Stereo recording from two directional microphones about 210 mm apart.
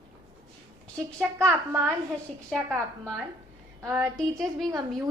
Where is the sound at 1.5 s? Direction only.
10° right (ahead or behind).